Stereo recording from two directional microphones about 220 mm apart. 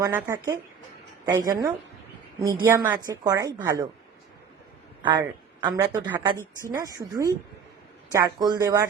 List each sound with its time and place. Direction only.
0.0 s a woman's voice: 10° right (ahead or behind)
5.0 s speech: 20° right (ahead or behind)
6.3 s a woman's voice: 10° left (ahead or behind)
6.7 s a woman's voice: 15° right (ahead or behind)